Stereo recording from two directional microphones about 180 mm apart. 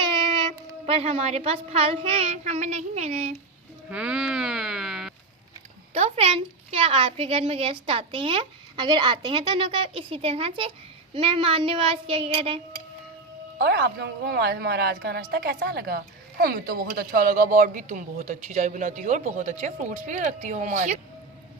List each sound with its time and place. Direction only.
0.3 s speech: 30° right (ahead or behind)
3.8 s speech: 5° right (ahead or behind)
5.9 s speech: 35° right (ahead or behind)
11.1 s child singing: 30° right (ahead or behind)
13.6 s a woman's voice: 60° right (ahead or behind); by 21.0 s 40° right (ahead or behind)